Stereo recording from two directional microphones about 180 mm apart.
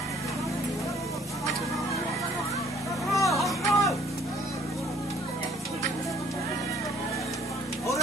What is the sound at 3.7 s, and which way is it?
Music, 15° left (ahead or behind).